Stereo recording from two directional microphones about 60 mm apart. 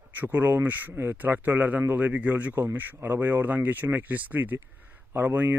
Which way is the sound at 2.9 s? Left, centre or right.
Right.